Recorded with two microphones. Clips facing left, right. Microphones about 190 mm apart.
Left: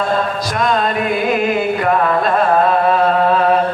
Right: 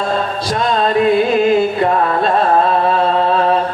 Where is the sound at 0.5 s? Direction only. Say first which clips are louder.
Right 3 dB; 30° right (ahead or behind).